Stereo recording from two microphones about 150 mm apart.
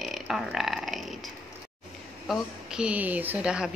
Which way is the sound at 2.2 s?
5° right (ahead or behind).